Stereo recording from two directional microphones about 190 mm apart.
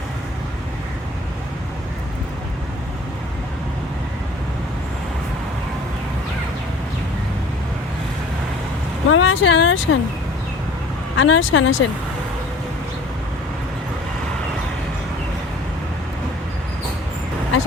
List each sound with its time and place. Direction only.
9.0 s speech: 90° left
11.2 s speech: 90° left